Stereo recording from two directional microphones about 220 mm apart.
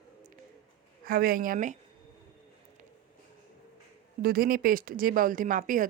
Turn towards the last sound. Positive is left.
turn(degrees=-35)  # may be behind; listen again after turning